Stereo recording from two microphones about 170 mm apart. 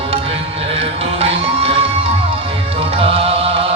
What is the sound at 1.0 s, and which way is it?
Music, 35° right (ahead or behind).